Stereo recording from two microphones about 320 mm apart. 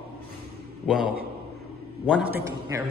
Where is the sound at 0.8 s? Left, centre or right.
Centre.